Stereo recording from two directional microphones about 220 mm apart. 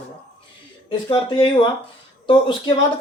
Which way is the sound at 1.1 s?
20° left (ahead or behind).